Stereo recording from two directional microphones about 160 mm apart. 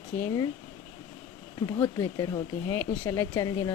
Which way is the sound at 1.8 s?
20° left (ahead or behind).